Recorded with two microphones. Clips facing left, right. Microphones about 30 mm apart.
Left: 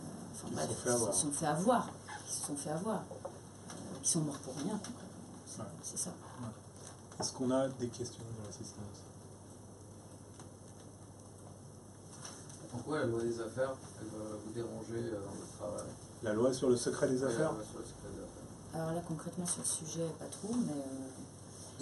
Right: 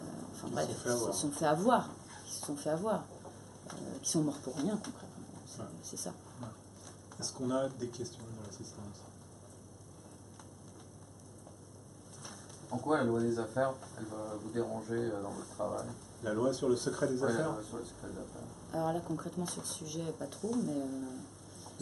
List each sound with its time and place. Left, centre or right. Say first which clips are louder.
0.0 s speech: right 3 dB; centre
2.5 s a sound: right 4 dB; centre
4.0 s speech: right 4 dB; centre
7.2 s speech: left 1 dB; centre
12.2 s a sound: right 1 dB; centre
13.0 s speech: right 3 dB; centre
15.6 s speech: right 6 dB; right
16.2 s speech: even; centre
20.3 s speech: right 2 dB; centre